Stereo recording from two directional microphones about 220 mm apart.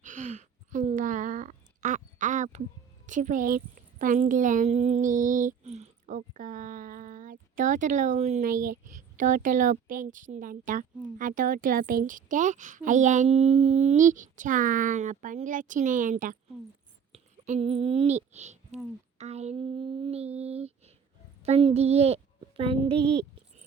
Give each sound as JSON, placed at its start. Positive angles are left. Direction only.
{"t": 0.0, "sound": "a sound", "side_deg": -35}
{"t": 3.1, "sound": "a woman's voice", "side_deg": -35}
{"t": 19.2, "sound": "child singing", "side_deg": -30}
{"t": 21.4, "sound": "a child's voice", "side_deg": -30}